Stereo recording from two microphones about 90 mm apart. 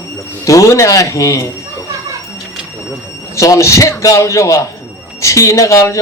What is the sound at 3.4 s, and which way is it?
Speech, 35° left (ahead or behind).